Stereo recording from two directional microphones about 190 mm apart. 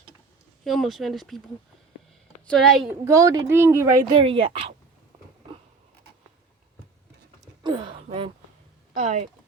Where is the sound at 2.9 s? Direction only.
15° right (ahead or behind).